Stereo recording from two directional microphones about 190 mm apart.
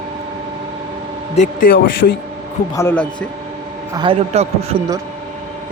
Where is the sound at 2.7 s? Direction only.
10° left (ahead or behind).